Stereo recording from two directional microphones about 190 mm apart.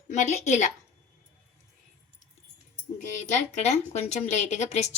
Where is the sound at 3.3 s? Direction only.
35° left (ahead or behind).